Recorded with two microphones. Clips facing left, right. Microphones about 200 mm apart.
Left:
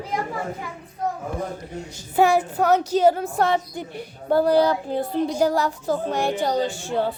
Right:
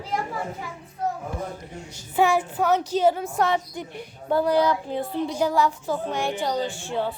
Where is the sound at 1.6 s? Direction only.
40° left (ahead or behind).